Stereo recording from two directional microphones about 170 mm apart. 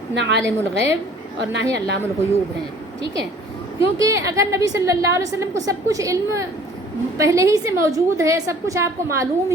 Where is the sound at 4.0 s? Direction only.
20° right (ahead or behind).